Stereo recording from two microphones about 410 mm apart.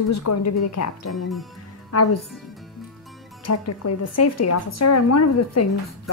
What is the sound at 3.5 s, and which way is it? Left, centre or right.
Speech, left.